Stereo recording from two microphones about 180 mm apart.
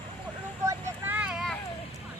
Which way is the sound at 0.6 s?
10° right (ahead or behind).